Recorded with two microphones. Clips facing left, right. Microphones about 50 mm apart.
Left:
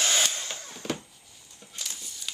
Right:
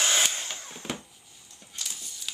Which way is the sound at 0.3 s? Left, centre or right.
Centre.